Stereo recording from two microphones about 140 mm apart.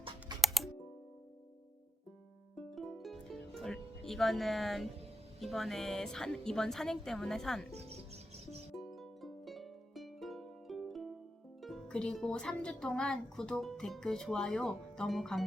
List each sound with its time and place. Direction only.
0.4 s music: centre (ahead or behind)
2.6 s music: centre (ahead or behind)
5.4 s speech: centre (ahead or behind)
7.7 s music: 50° right (ahead or behind)
8.7 s music: centre (ahead or behind)
11.6 s speech: centre (ahead or behind)